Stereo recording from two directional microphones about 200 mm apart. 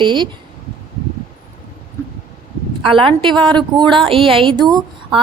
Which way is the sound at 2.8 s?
25° right (ahead or behind).